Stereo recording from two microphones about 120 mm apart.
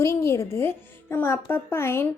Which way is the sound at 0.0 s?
20° left (ahead or behind).